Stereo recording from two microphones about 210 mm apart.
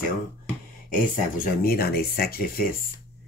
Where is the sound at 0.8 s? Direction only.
40° left (ahead or behind).